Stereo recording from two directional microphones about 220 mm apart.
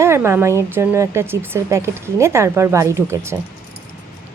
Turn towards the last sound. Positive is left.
turn(degrees=-10)  # may be behind; listen again after turning